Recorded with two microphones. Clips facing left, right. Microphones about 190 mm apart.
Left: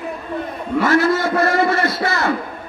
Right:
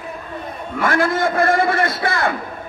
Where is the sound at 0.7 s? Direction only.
50° right (ahead or behind).